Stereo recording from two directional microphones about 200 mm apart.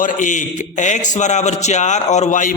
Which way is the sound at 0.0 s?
40° left (ahead or behind).